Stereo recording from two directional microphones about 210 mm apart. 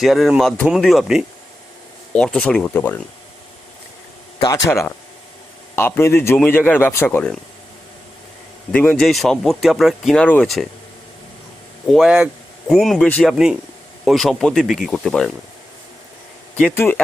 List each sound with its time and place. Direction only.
0.0 s speech: centre (ahead or behind)
4.4 s a man's voice: 20° left (ahead or behind)
8.7 s speech: 5° left (ahead or behind)
11.9 s speech: 5° right (ahead or behind)
16.6 s a man's voice: 10° left (ahead or behind)